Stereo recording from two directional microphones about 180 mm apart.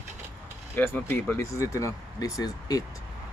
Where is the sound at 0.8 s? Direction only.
10° left (ahead or behind).